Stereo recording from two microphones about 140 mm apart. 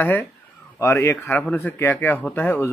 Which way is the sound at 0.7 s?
20° left (ahead or behind).